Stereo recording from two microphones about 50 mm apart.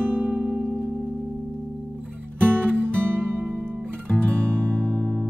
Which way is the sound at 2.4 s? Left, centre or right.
Right.